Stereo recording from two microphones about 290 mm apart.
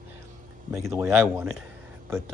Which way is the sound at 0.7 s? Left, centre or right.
Centre.